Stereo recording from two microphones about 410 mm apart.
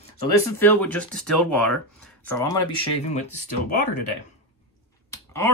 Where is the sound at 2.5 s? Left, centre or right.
Left.